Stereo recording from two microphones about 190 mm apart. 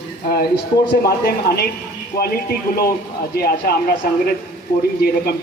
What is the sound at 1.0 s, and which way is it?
Speech, 55° left (ahead or behind).